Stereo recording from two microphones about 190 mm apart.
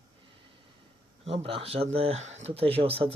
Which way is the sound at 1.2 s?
30° right (ahead or behind).